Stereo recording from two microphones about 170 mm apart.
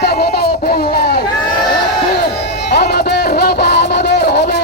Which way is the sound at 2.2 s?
75° left (ahead or behind).